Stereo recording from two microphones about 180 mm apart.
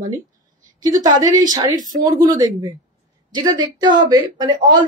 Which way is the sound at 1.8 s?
20° right (ahead or behind).